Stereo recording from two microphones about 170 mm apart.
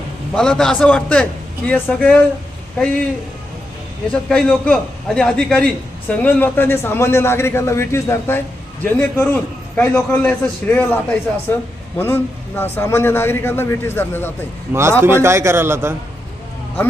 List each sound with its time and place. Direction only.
0.3 s a man's voice: 5° left (ahead or behind)
4.1 s a man's voice: 5° left (ahead or behind)
14.7 s a man's voice: 15° right (ahead or behind)